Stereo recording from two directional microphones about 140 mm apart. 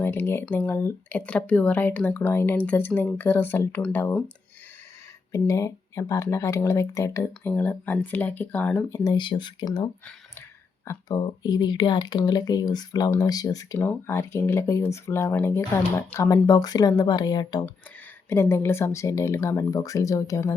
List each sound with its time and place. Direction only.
0.0 s speech: 15° left (ahead or behind)
5.3 s speech: 20° left (ahead or behind)
9.0 s speech: 35° left (ahead or behind)
10.8 s speech: 30° left (ahead or behind)
18.3 s speech: 20° left (ahead or behind)